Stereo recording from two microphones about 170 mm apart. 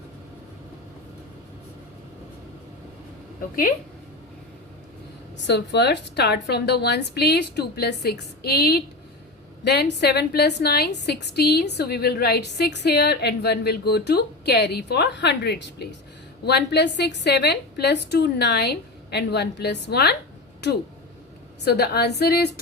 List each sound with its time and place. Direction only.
5.5 s a woman's voice: 85° left
9.6 s a woman's voice: 85° left
21.6 s a woman's voice: 70° left (ahead or behind)